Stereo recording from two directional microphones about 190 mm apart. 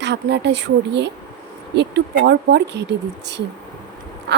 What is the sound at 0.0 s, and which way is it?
A woman's voice, 65° right (ahead or behind).